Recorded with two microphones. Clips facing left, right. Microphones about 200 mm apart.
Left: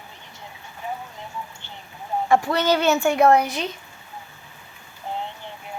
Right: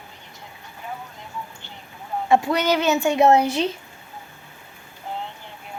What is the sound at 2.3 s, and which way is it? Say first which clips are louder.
A woman's voice: right 1 dB; 20° right (ahead or behind).